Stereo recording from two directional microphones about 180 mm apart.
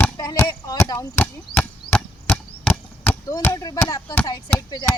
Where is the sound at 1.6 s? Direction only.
5° left (ahead or behind).